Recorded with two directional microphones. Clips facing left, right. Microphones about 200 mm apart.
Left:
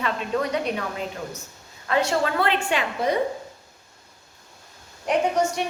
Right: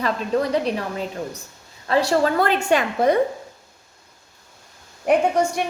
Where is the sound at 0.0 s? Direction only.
35° right (ahead or behind).